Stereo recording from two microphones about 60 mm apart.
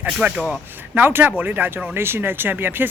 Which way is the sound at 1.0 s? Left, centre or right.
Right.